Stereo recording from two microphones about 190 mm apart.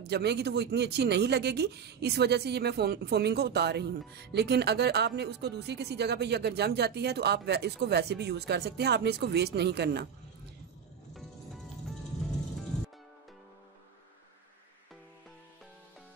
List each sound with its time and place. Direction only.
0.0 s speech: 60° right (ahead or behind)